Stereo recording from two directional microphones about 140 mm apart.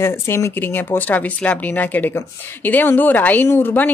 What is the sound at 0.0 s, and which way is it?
Speech, 15° left (ahead or behind).